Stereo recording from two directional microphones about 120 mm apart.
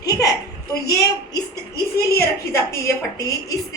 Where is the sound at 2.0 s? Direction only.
25° left (ahead or behind).